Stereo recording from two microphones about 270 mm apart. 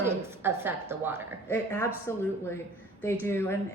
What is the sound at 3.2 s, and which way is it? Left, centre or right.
Speech, centre.